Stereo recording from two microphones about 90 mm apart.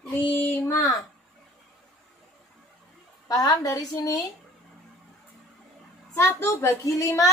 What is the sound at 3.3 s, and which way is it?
Speech, 45° left (ahead or behind).